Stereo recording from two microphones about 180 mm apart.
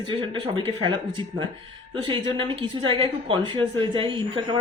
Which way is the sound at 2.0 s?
25° right (ahead or behind).